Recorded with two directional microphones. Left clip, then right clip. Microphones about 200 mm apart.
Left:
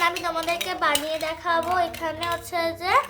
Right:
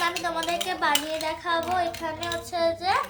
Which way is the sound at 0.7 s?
35° left (ahead or behind).